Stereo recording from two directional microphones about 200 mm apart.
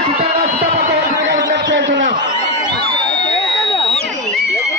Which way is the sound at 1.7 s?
65° right (ahead or behind).